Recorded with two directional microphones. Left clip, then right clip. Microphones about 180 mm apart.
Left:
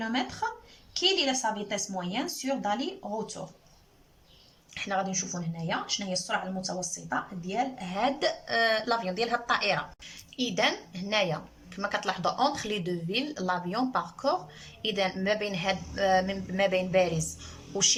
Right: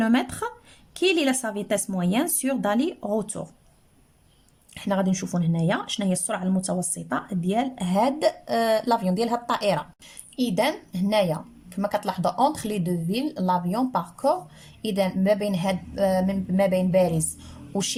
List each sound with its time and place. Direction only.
0.4 s a sound: 45° right (ahead or behind)
0.9 s speech: 50° right (ahead or behind)
4.7 s a woman's voice: 30° right (ahead or behind)